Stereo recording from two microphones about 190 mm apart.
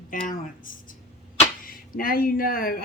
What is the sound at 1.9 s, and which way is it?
Speech, 50° left (ahead or behind).